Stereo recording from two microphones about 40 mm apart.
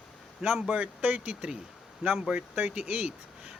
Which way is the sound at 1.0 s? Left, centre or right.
Right.